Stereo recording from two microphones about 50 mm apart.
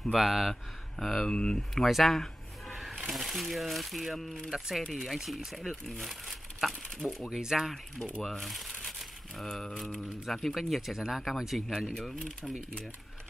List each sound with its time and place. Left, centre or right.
0.1 s speech: centre
1.2 s speech: centre
1.8 s speech: centre
2.7 s a sound: centre
3.1 s speech: centre
7.2 s speech: centre
8.2 s speech: centre
10.2 s speech: centre